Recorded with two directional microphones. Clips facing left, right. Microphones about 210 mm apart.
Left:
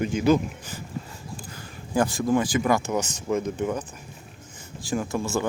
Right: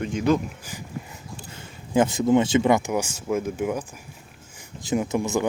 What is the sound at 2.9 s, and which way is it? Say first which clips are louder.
Speech: right 1 dB; 10° right (ahead or behind).